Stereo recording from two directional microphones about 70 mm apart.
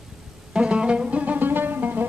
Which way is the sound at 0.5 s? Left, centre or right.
Centre.